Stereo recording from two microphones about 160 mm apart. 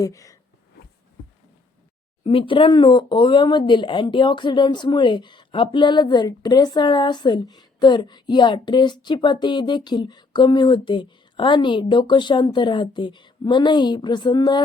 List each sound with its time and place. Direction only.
0.0 s speech: 20° left (ahead or behind)
2.2 s speech: 35° left (ahead or behind)